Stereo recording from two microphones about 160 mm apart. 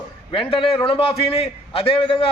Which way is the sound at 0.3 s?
35° left (ahead or behind).